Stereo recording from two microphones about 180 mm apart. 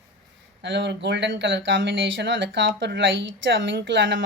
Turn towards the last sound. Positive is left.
turn(degrees=-90)